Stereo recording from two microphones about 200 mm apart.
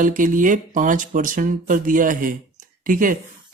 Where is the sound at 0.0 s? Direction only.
40° right (ahead or behind).